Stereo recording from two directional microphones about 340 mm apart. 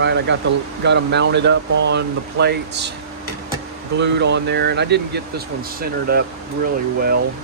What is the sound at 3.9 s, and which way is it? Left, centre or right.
Speech, right.